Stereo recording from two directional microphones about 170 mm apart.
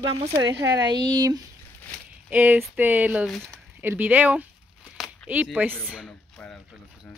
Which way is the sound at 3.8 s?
10° right (ahead or behind).